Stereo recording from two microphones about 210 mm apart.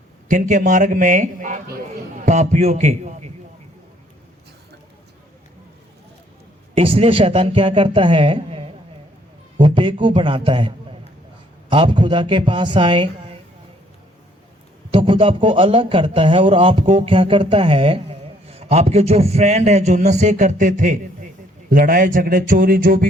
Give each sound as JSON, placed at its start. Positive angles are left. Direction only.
{"t": 0.3, "sound": "a man's voice", "side_deg": -35}
{"t": 6.7, "sound": "a man's voice", "side_deg": -25}
{"t": 11.7, "sound": "a man's voice", "side_deg": -25}
{"t": 14.9, "sound": "a man's voice", "side_deg": -25}